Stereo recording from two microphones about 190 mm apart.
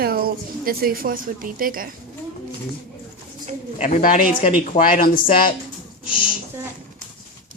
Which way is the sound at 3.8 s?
40° left (ahead or behind).